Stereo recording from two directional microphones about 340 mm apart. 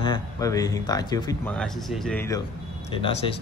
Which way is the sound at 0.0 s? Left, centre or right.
Centre.